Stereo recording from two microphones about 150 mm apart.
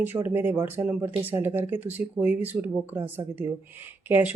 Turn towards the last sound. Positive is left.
turn(degrees=-15)  # may be behind; listen again after turning